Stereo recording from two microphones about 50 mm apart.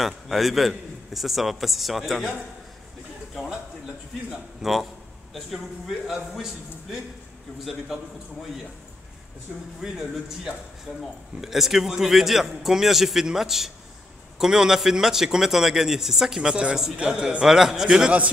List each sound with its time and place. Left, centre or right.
0.0 s a man's voice: centre
4.3 s a man's voice: centre
9.8 s a man's voice: centre
17.5 s a man's voice: centre